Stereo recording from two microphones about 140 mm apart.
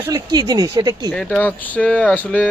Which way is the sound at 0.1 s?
30° right (ahead or behind).